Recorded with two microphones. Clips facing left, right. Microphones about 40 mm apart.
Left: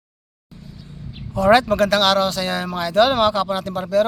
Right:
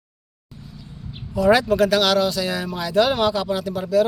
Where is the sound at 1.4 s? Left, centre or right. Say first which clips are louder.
Left 2 dB; left.